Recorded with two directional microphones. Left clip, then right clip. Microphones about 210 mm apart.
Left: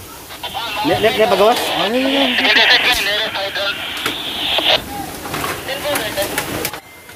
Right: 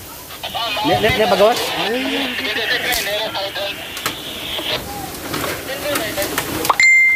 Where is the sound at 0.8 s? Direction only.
5° left (ahead or behind).